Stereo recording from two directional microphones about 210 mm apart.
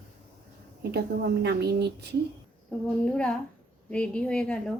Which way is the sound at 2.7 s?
5° left (ahead or behind).